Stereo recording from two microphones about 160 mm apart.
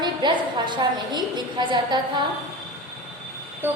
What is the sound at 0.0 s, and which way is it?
A woman's voice, 25° right (ahead or behind).